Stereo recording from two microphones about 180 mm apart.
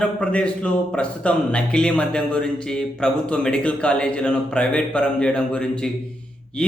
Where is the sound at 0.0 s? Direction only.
5° left (ahead or behind).